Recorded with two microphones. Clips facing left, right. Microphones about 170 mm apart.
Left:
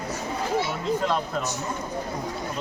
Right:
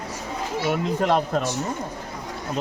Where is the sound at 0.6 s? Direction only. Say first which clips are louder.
Right 4 dB; 65° right (ahead or behind).